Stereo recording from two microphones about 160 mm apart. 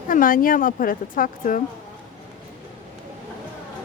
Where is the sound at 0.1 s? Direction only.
60° left (ahead or behind).